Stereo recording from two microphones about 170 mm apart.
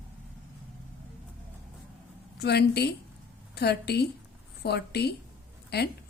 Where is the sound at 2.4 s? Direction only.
70° left (ahead or behind).